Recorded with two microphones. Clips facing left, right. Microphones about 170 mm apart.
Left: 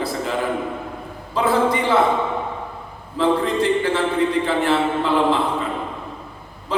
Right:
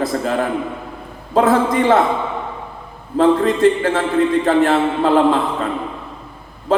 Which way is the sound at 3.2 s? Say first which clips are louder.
Right 5 dB; 45° right (ahead or behind).